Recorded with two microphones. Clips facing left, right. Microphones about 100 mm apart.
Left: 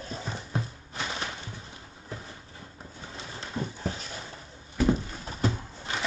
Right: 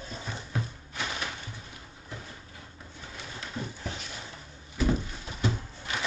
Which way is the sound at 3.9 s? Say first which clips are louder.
Left 4 dB; 35° left (ahead or behind).